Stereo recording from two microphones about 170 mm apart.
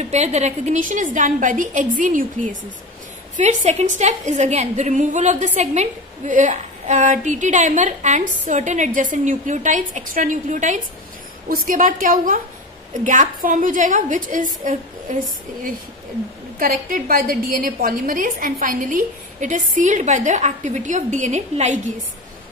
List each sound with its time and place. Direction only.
0.0 s a woman's voice: 40° right (ahead or behind)
3.3 s a woman's voice: 40° right (ahead or behind)
16.5 s a woman's voice: 55° right (ahead or behind)